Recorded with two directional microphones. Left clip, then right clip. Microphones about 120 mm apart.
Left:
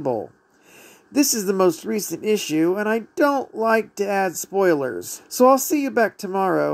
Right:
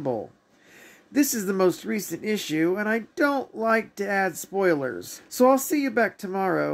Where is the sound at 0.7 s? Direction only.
50° left (ahead or behind).